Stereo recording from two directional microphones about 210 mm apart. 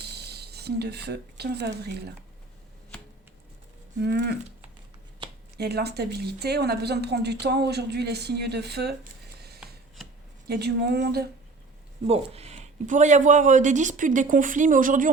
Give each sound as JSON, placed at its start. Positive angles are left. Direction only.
{"t": 0.1, "sound": "speech", "side_deg": -50}
{"t": 4.0, "sound": "a woman's voice", "side_deg": -50}
{"t": 5.5, "sound": "a woman's voice", "side_deg": -50}
{"t": 10.5, "sound": "a woman's voice", "side_deg": -50}
{"t": 12.0, "sound": "speech", "side_deg": -30}